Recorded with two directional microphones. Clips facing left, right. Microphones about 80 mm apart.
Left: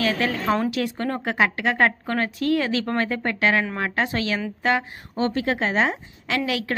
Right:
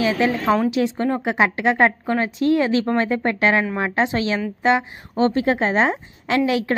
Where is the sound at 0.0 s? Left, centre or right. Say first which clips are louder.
Right 4 dB; centre.